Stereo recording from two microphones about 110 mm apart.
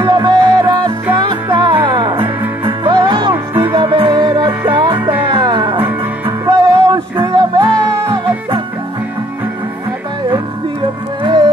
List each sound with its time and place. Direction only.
0.0 s music: 40° right (ahead or behind)
10.3 s music: 45° right (ahead or behind)